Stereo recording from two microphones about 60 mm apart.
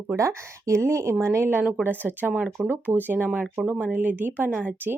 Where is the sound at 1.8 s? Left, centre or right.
Right.